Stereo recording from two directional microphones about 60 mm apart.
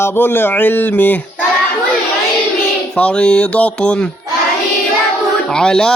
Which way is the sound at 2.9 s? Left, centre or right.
Centre.